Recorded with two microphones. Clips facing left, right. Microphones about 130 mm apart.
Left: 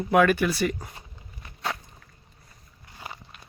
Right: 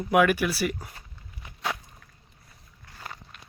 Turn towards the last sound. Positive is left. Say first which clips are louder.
# left 1 dB
turn(degrees=10)  # may be behind; listen again after turning